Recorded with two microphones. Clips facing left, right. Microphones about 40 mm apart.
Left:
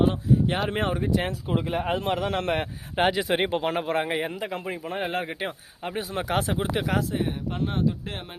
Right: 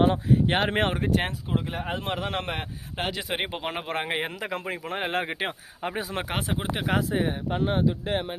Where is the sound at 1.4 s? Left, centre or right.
Centre.